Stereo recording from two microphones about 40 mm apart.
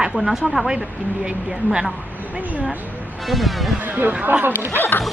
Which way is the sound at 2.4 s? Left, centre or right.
Right.